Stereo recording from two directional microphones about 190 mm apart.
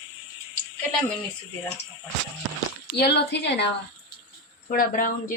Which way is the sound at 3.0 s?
60° left (ahead or behind).